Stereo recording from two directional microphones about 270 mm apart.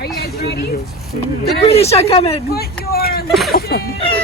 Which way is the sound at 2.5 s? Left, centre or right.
Left.